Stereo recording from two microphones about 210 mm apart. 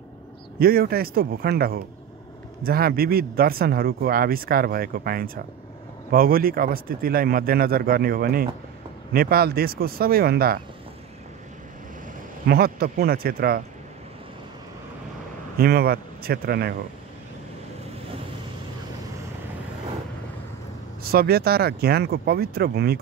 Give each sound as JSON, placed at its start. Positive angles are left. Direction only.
{"t": 0.6, "sound": "speech", "side_deg": -45}
{"t": 12.4, "sound": "speech", "side_deg": -45}
{"t": 15.5, "sound": "a man's voice", "side_deg": -45}
{"t": 21.0, "sound": "speech", "side_deg": -45}